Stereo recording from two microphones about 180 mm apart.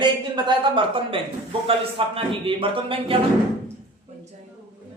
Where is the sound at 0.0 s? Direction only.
25° right (ahead or behind).